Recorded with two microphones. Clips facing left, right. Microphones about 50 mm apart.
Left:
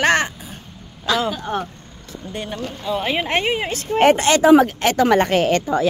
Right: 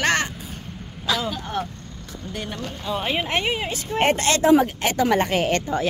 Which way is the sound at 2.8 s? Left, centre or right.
Centre.